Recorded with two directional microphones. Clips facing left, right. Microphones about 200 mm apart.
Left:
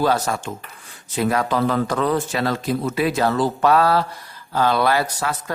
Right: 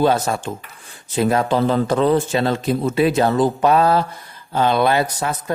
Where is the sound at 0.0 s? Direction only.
25° right (ahead or behind).